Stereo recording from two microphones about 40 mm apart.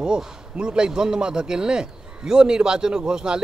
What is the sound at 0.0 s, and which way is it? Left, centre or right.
A man's voice, centre.